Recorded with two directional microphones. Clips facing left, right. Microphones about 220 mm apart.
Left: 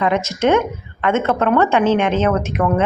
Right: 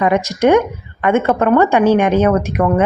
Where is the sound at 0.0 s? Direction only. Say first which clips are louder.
Right 3 dB; 15° right (ahead or behind).